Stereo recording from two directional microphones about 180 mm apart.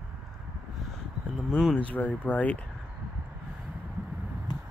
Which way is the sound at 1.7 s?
10° left (ahead or behind).